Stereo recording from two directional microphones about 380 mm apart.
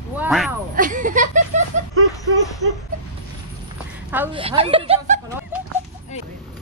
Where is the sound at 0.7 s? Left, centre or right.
Right.